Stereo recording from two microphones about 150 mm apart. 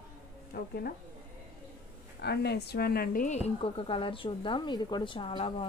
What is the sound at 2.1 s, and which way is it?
A woman's voice, 90° left.